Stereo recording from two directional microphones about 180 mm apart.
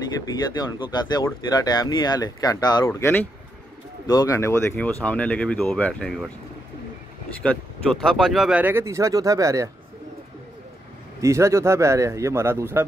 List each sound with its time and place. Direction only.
0.9 s speech: 20° left (ahead or behind); by 6.2 s 5° left (ahead or behind)
7.4 s speech: centre (ahead or behind); by 9.7 s 15° right (ahead or behind)
11.1 s speech: 15° right (ahead or behind)